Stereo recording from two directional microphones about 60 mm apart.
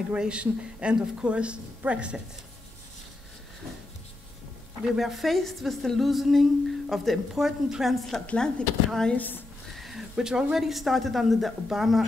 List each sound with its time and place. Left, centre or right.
0.1 s a woman's voice: centre
4.8 s speech: centre
8.4 s speech: centre
9.1 s a woman's voice: left
9.8 s a sound: centre
10.1 s speech: centre